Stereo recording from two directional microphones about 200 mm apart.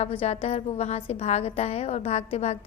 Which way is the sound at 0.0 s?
30° left (ahead or behind).